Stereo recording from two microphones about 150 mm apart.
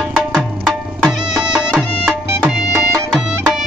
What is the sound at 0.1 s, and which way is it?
Tabla, 5° left (ahead or behind).